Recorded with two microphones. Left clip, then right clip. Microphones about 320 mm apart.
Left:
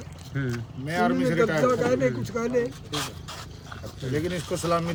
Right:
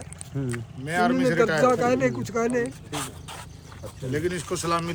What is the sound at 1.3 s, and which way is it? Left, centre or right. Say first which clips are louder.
Speech: right 3 dB; right.